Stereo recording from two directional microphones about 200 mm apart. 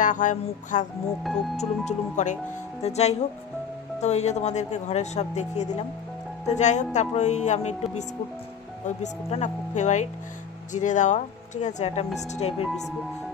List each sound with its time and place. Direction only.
0.0 s speech: 40° left (ahead or behind)